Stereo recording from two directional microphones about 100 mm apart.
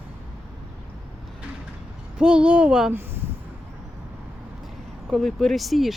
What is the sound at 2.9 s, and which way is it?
Speech, 20° right (ahead or behind).